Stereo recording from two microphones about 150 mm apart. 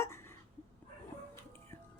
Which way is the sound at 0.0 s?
15° left (ahead or behind).